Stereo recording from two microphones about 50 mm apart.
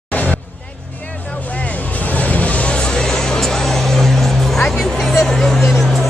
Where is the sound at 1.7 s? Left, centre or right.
Left.